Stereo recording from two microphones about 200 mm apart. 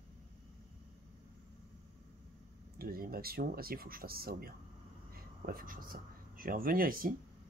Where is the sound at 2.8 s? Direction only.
50° right (ahead or behind).